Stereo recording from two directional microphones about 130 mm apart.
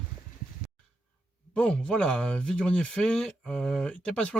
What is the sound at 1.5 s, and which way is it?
Speech, 10° left (ahead or behind).